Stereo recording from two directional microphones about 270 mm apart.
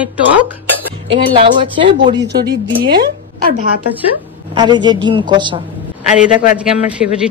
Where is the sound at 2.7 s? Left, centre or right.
Right.